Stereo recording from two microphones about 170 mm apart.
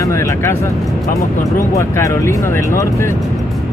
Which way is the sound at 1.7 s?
15° left (ahead or behind).